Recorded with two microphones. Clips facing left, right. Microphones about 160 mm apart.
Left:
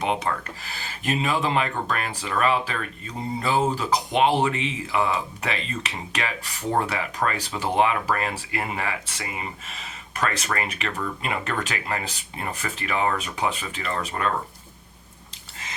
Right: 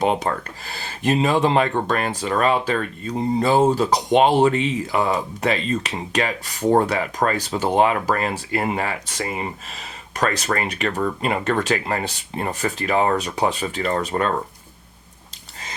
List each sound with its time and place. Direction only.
0.0 s speech: 40° right (ahead or behind)